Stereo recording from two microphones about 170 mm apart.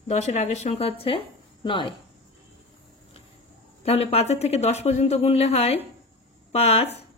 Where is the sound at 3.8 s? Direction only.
35° left (ahead or behind).